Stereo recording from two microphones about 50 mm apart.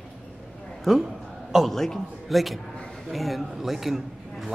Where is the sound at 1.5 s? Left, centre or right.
Centre.